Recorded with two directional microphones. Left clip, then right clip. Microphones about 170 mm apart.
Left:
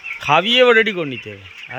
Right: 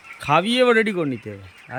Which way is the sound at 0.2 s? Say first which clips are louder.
Left 5 dB; 15° right (ahead or behind).